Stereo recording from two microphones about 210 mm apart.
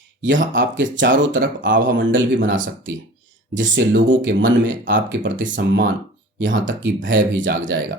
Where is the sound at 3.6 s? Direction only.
60° right (ahead or behind).